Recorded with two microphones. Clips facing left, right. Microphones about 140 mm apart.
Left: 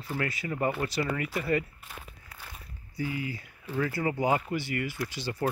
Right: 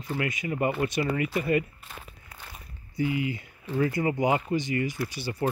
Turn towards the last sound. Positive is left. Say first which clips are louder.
# right 2 dB
turn(degrees=-10)  # may be behind; listen again after turning